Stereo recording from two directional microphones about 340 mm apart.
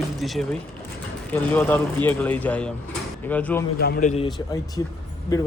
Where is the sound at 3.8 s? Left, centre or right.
Left.